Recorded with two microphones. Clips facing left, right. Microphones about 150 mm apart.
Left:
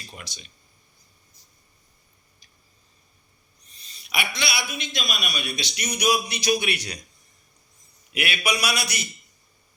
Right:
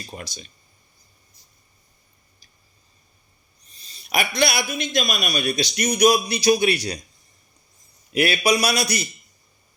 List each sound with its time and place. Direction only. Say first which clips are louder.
0.0 s a man's voice: right 6 dB; 40° right (ahead or behind)
3.7 s a man's voice: right 7 dB; 35° right (ahead or behind)
8.1 s a man's voice: right 7 dB; 35° right (ahead or behind)